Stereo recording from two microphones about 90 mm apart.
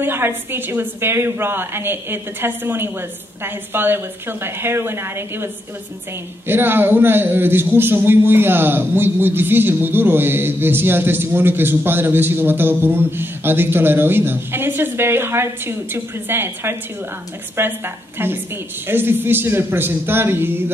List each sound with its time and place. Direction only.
0.0 s a man's voice: 25° right (ahead or behind)